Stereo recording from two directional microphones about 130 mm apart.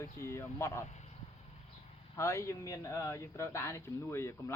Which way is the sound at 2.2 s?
20° left (ahead or behind).